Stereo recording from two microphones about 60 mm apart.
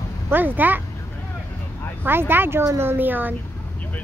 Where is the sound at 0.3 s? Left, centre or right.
Right.